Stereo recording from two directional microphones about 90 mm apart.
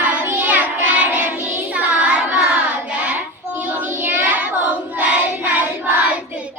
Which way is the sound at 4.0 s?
20° right (ahead or behind).